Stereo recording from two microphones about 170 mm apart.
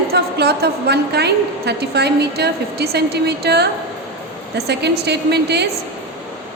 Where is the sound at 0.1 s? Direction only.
70° right (ahead or behind).